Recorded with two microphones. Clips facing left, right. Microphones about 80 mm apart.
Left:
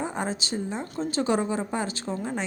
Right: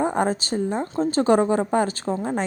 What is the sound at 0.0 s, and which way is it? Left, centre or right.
A woman's voice, right.